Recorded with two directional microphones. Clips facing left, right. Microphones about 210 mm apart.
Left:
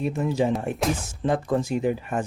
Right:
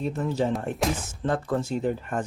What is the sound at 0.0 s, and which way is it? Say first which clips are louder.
Speech: left 2 dB; 10° left (ahead or behind).